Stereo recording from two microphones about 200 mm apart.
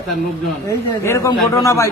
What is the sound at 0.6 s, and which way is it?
A man's voice, 15° left (ahead or behind).